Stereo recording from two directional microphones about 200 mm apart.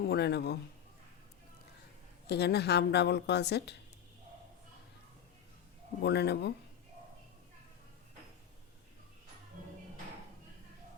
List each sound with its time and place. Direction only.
0.0 s a woman's voice: 55° left (ahead or behind)
2.2 s a woman's voice: 55° left (ahead or behind)
6.0 s a woman's voice: 55° left (ahead or behind)